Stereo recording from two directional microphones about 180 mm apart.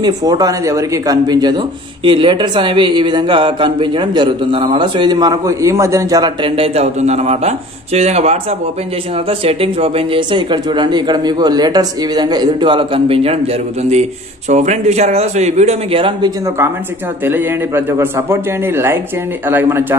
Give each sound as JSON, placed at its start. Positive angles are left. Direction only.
{"t": 0.0, "sound": "a man's voice", "side_deg": -20}
{"t": 17.2, "sound": "a man's voice", "side_deg": -10}